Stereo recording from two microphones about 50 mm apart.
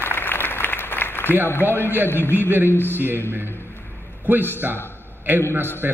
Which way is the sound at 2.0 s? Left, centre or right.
Left.